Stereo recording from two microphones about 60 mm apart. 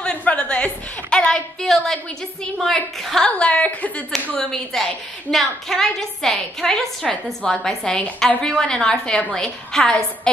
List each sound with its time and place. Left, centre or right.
0.0 s chuckle: left
1.1 s a sound: centre
2.6 s a woman's voice: centre
3.3 s a woman's voice: centre
4.4 s a woman's voice: centre